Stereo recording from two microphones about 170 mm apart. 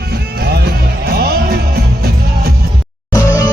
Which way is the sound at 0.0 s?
70° right (ahead or behind).